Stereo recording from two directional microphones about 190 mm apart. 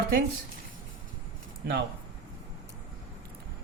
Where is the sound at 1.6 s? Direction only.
65° right (ahead or behind).